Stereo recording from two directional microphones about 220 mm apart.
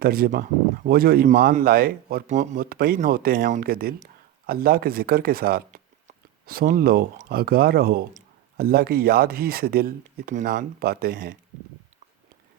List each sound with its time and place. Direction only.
0.0 s speech: 45° right (ahead or behind)